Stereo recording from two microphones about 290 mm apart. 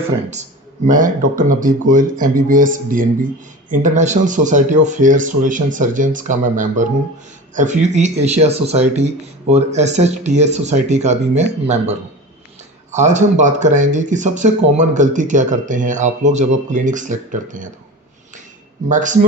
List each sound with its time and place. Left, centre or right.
0.9 s speech: right
18.9 s speech: right